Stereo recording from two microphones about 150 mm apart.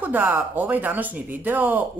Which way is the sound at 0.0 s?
10° right (ahead or behind).